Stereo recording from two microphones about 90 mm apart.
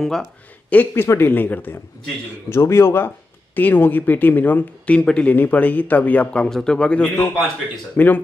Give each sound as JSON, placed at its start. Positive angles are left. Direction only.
{"t": 0.0, "sound": "speech", "side_deg": 0}
{"t": 0.7, "sound": "speech", "side_deg": 20}